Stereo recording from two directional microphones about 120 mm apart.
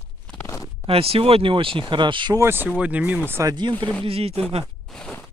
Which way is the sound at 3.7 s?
10° left (ahead or behind).